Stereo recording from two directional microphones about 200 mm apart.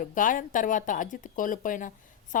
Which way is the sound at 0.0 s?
40° left (ahead or behind).